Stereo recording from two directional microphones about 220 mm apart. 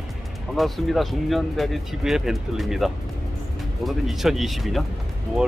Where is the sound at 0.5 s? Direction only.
Centre (ahead or behind).